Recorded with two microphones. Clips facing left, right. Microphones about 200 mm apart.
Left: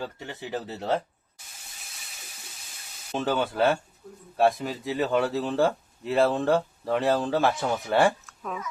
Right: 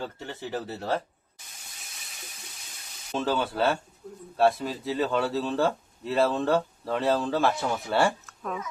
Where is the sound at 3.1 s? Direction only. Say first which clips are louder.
Left 1 dB; 15° left (ahead or behind).